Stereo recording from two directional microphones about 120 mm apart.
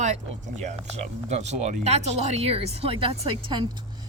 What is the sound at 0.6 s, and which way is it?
Speech, 70° right (ahead or behind).